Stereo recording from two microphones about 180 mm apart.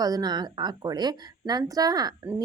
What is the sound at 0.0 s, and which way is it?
A woman's voice, 20° right (ahead or behind).